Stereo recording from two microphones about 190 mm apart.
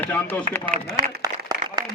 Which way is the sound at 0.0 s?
10° left (ahead or behind).